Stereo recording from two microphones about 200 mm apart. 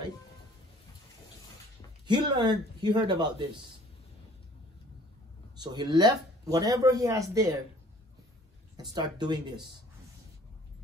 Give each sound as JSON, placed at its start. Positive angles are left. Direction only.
{"t": 2.0, "sound": "speech", "side_deg": -20}
{"t": 5.6, "sound": "speech", "side_deg": -20}
{"t": 8.7, "sound": "speech", "side_deg": -20}